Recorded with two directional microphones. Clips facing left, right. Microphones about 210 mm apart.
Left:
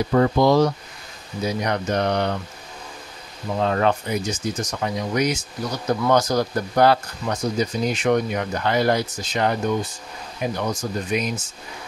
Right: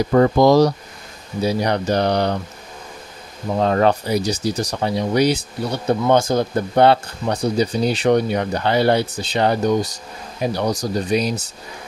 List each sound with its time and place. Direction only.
0.1 s speech: 40° right (ahead or behind)
3.5 s speech: 35° right (ahead or behind)